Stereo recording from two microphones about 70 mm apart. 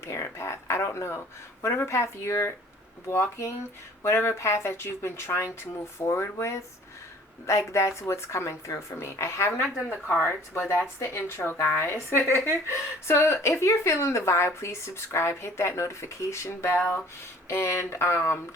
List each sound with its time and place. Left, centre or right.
0.0 s a woman's voice: left